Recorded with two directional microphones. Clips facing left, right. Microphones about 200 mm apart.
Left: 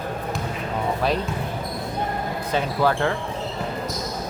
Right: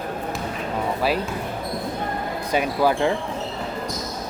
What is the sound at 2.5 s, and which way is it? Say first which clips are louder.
Speech: right 2 dB; 10° right (ahead or behind).